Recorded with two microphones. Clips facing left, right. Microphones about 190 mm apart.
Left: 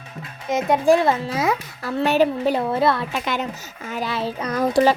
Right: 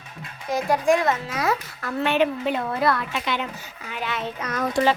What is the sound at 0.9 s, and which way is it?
A woman's voice, 30° left (ahead or behind).